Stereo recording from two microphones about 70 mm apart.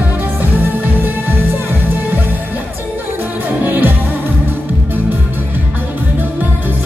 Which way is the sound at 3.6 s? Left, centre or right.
Right.